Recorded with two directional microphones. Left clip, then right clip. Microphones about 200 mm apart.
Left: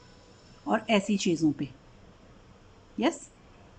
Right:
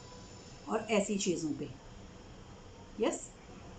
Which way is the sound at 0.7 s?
50° left (ahead or behind).